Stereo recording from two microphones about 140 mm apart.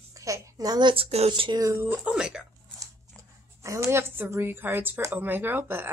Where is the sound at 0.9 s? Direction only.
45° right (ahead or behind).